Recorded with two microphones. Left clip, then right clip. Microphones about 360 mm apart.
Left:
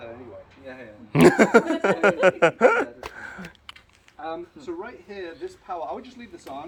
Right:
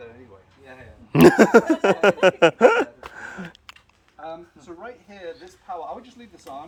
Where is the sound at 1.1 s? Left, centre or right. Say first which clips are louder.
Right 3 dB; right.